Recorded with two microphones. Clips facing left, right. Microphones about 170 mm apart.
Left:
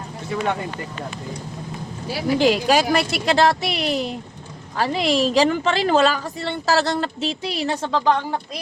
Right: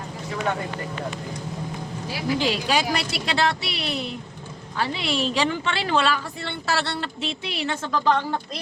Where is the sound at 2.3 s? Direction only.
50° left (ahead or behind); by 8.0 s 35° left (ahead or behind).